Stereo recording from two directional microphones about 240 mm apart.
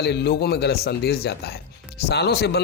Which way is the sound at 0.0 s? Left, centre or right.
Left.